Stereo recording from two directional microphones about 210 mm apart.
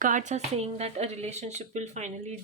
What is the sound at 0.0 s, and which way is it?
Speech, 35° right (ahead or behind).